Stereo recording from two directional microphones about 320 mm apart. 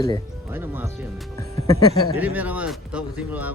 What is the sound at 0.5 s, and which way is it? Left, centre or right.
Speech, centre.